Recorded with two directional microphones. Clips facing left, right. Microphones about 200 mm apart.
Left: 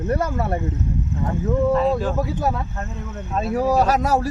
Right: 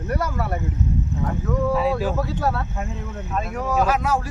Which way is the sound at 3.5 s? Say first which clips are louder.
Left 4 dB; 35° left (ahead or behind).